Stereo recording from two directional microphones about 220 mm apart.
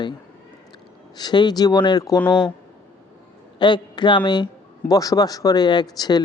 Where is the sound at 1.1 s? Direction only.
20° left (ahead or behind).